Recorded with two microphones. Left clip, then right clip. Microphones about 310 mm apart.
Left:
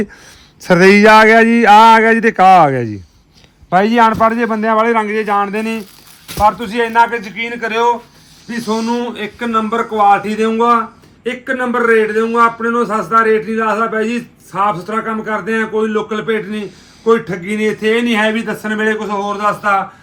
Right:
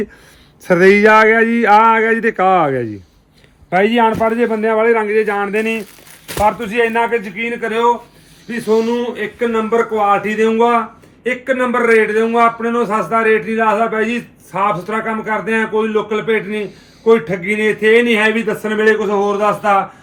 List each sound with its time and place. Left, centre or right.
0.6 s a man's voice: left